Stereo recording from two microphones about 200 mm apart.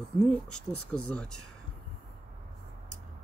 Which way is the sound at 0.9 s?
5° left (ahead or behind).